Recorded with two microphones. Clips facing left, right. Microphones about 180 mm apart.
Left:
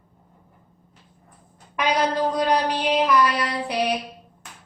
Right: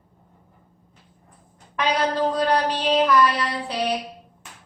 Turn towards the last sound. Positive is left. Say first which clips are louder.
# left 1 dB
turn(degrees=10)  # may be behind; listen again after turning